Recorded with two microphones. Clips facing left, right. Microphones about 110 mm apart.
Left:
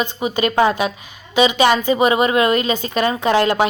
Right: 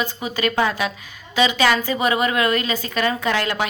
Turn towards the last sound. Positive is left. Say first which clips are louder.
# left 6 dB
turn(degrees=25)  # may be behind; listen again after turning